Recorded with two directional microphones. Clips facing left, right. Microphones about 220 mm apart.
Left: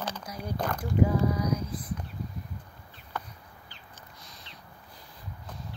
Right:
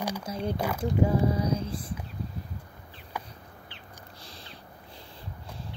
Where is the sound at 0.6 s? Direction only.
10° right (ahead or behind).